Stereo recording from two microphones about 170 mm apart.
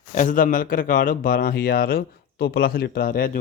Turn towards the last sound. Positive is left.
turn(degrees=55)  # may be behind; listen again after turning